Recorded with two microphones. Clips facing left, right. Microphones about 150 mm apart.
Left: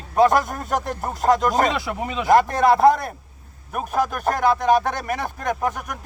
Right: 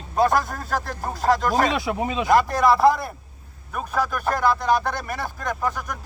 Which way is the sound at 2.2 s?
50° left (ahead or behind).